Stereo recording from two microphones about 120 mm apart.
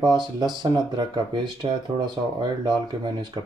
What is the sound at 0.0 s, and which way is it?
Speech, 40° right (ahead or behind).